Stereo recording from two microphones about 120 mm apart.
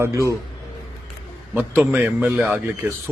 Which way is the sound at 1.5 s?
15° right (ahead or behind).